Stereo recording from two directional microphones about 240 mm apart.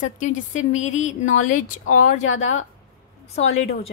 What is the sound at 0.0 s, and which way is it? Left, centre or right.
A woman's voice, left.